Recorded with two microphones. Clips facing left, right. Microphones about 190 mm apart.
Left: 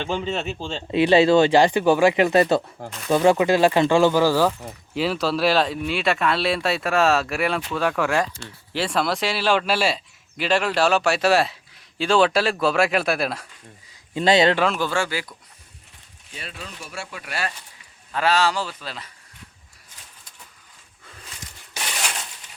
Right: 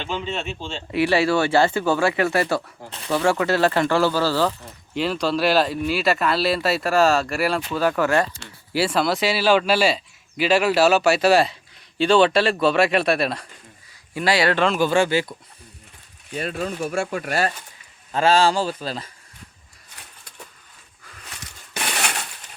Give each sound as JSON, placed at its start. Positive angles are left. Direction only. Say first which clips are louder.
{"t": 0.0, "sound": "a man's voice", "louder": "left 2 dB", "side_deg": 40}
{"t": 0.9, "sound": "speech", "louder": "left 4 dB", "side_deg": 20}
{"t": 14.1, "sound": "speech", "louder": "left 3 dB", "side_deg": 25}
{"t": 14.5, "sound": "speech", "louder": "right 1 dB", "side_deg": 5}
{"t": 14.8, "sound": "speech", "louder": "right 6 dB", "side_deg": -20}
{"t": 16.3, "sound": "speech", "louder": "right 12 dB", "side_deg": -50}
{"t": 18.1, "sound": "speech", "louder": "right 3 dB", "side_deg": -25}
{"t": 21.7, "sound": "crushing", "louder": "right 4 dB", "side_deg": -60}